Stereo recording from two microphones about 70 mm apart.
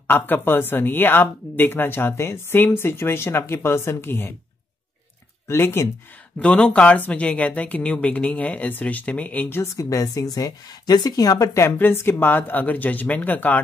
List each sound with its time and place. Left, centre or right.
0.0 s speech: left
5.5 s speech: left
6.4 s speech: centre
9.8 s speech: left
11.6 s speech: left